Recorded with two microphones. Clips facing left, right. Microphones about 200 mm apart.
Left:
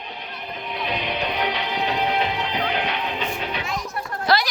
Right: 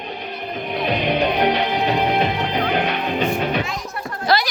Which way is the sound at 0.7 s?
55° right (ahead or behind).